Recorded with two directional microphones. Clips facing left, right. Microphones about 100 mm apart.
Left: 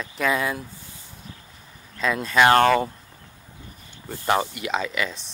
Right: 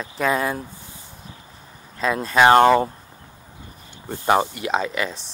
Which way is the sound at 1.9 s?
40° right (ahead or behind).